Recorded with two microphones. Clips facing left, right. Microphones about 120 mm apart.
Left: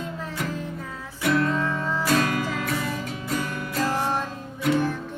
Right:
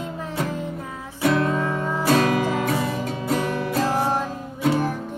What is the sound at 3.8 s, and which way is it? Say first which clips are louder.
Music: right 1 dB; 15° right (ahead or behind).